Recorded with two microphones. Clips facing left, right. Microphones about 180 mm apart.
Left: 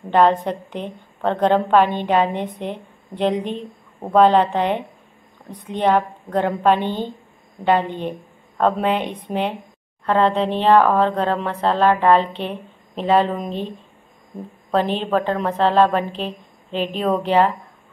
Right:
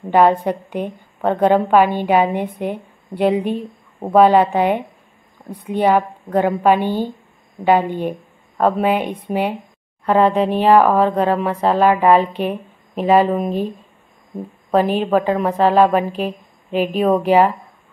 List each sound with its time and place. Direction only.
0.1 s a woman's voice: 10° right (ahead or behind)